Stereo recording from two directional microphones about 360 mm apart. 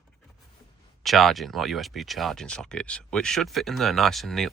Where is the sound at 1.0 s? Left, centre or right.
Centre.